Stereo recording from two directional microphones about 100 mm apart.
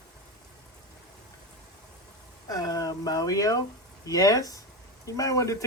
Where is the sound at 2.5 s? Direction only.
40° left (ahead or behind).